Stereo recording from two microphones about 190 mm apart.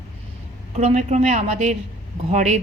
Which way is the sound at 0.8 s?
35° right (ahead or behind).